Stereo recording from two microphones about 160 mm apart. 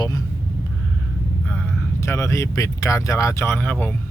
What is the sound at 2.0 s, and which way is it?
Speech, 20° left (ahead or behind).